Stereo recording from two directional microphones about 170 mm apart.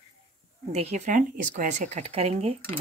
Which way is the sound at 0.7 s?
40° right (ahead or behind).